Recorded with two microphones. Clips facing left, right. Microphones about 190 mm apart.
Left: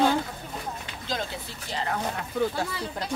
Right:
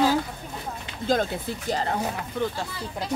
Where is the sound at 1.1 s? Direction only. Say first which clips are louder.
Right 9 dB; 45° right (ahead or behind).